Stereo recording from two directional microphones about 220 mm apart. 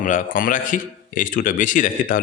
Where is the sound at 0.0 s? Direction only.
40° left (ahead or behind).